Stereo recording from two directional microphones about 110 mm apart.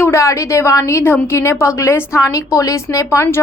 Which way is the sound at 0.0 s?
25° left (ahead or behind).